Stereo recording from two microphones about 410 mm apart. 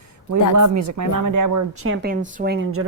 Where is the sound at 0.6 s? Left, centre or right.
Right.